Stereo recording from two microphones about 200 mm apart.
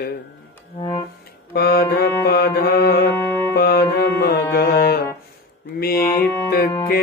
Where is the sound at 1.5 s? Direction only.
50° left (ahead or behind).